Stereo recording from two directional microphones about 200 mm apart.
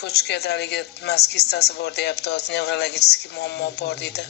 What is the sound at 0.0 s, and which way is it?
A woman's voice, 55° left (ahead or behind).